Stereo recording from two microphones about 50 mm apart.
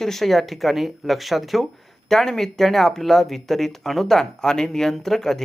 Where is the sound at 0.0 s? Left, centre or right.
Centre.